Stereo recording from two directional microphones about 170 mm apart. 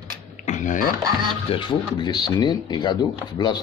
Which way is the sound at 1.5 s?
30° left (ahead or behind).